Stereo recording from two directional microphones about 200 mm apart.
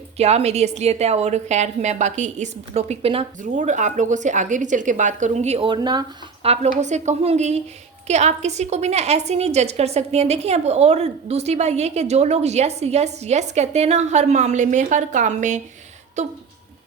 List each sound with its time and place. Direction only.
0.2 s a woman's voice: 30° right (ahead or behind)